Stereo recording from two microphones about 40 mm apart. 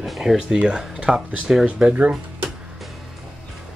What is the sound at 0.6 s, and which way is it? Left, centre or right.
Speech, right.